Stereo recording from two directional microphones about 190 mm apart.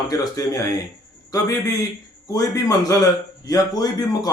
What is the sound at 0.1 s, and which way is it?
Speech, 20° left (ahead or behind).